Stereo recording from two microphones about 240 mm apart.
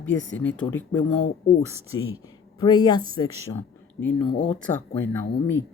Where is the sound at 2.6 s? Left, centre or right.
Centre.